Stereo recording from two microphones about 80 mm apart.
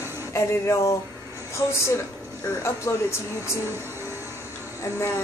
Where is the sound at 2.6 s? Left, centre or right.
Left.